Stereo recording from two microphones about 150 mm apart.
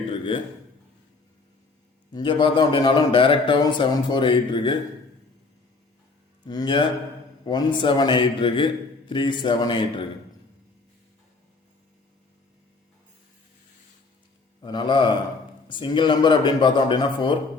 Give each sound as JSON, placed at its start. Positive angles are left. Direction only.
{"t": 0.3, "sound": "a man's voice", "side_deg": 35}
{"t": 2.1, "sound": "a man's voice", "side_deg": 35}
{"t": 6.4, "sound": "a man's voice", "side_deg": 30}
{"t": 14.6, "sound": "a man's voice", "side_deg": 30}